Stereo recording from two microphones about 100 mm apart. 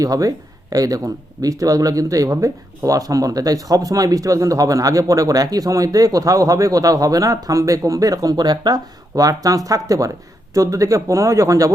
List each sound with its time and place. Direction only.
0.0 s speech: 35° right (ahead or behind)